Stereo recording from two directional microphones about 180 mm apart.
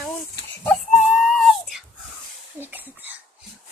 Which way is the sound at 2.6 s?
10° right (ahead or behind).